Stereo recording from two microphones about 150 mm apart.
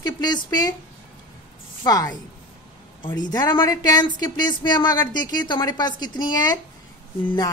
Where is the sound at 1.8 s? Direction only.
25° left (ahead or behind).